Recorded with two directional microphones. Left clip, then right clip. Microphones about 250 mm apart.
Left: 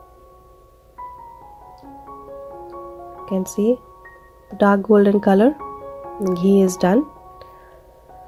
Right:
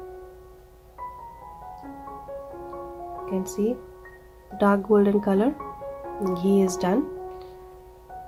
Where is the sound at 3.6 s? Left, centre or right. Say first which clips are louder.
Left 11 dB; left.